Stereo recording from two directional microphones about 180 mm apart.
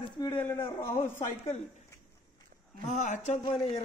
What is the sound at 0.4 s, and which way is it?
A man's voice, 15° left (ahead or behind).